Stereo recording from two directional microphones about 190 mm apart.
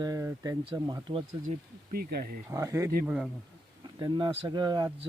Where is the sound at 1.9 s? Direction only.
55° right (ahead or behind).